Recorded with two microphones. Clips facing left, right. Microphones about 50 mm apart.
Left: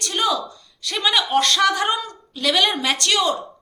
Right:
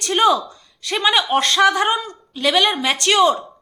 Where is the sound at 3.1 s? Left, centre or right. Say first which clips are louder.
Right 7 dB; right.